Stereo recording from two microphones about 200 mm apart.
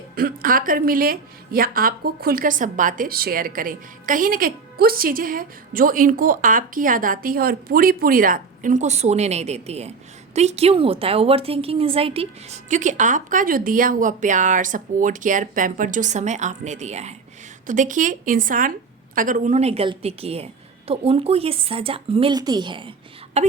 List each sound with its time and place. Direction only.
0.2 s a woman's voice: 45° right (ahead or behind); by 22.9 s 25° right (ahead or behind)
23.3 s a woman's voice: 35° right (ahead or behind)